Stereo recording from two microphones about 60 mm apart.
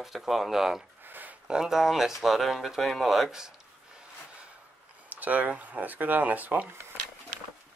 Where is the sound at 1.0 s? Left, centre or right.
Right.